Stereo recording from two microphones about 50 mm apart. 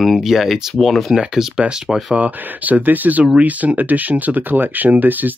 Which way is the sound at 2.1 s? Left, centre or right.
Right.